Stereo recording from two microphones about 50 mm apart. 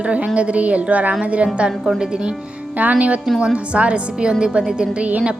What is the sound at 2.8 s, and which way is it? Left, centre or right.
A woman's voice, right.